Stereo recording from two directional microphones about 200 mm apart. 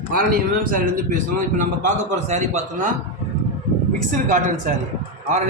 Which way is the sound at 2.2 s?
35° right (ahead or behind).